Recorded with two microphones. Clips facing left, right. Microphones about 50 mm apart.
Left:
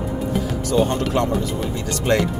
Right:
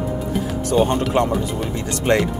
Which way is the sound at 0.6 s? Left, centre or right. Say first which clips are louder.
Right 2 dB; right.